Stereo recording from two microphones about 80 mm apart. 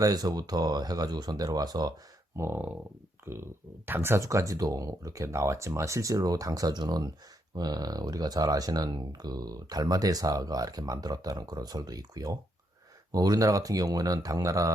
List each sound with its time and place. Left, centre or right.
0.0 s speech: right
2.3 s speech: right
4.2 s speech: right